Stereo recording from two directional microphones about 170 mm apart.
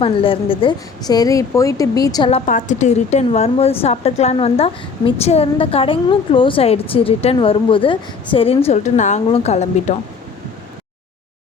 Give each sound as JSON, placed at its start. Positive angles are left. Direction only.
{"t": 0.0, "sound": "a woman's voice", "side_deg": 30}
{"t": 2.5, "sound": "a woman's voice", "side_deg": 50}